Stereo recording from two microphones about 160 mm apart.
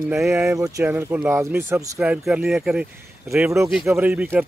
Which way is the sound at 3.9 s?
10° right (ahead or behind).